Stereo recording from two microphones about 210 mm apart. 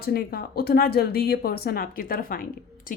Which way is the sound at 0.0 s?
50° left (ahead or behind).